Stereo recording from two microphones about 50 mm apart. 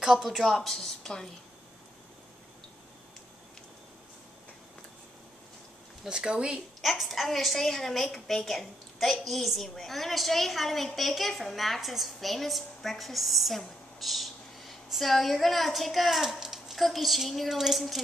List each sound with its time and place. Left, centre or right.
0.0 s a woman's voice: centre
6.0 s speech: centre
6.8 s a woman's voice: centre